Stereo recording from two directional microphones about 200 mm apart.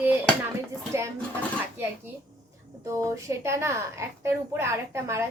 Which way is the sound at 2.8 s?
15° right (ahead or behind).